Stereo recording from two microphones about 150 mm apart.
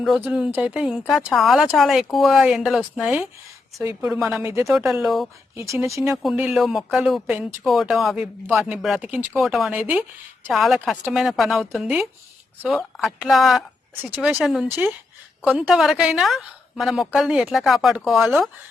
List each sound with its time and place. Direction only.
0.0 s speech: 5° right (ahead or behind)
4.4 s speech: 20° right (ahead or behind)
4.7 s speech: centre (ahead or behind)
5.5 s speech: 20° right (ahead or behind)
6.2 s speech: 5° right (ahead or behind)